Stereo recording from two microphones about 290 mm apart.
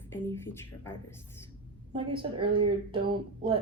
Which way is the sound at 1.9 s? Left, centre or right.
Centre.